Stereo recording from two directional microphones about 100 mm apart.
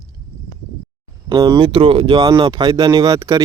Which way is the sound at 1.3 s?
40° right (ahead or behind).